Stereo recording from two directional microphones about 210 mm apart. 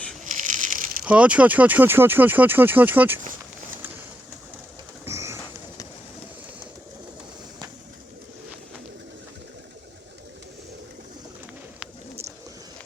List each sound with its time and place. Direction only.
0.3 s crumpling: 35° right (ahead or behind)
1.0 s speech: 5° right (ahead or behind)
5.0 s bird: 15° right (ahead or behind)